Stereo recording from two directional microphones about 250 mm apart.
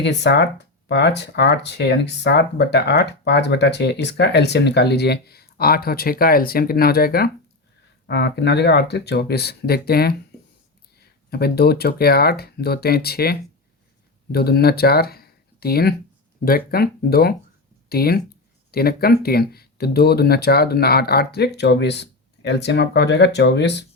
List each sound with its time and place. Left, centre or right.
0.0 s speech: left
14.3 s speech: left